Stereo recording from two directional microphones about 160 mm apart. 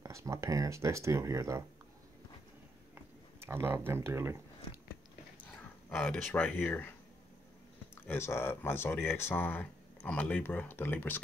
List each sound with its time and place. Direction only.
0.0 s speech: 20° right (ahead or behind)
2.9 s a sound: 15° right (ahead or behind)
5.4 s speech: 10° left (ahead or behind)
7.9 s speech: 15° left (ahead or behind)